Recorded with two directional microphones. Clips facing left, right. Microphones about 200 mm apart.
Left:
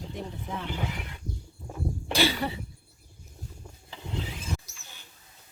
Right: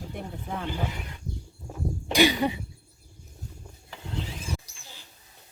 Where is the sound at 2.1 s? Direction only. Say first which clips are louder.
Right 5 dB; 15° right (ahead or behind).